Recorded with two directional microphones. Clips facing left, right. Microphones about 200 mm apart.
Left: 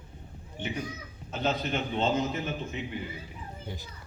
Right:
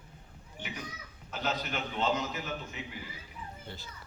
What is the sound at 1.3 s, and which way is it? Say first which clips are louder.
A man's voice: left 5 dB; 25° left (ahead or behind).